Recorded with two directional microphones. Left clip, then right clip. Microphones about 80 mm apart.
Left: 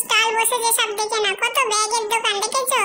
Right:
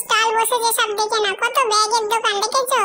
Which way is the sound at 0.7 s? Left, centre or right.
Right.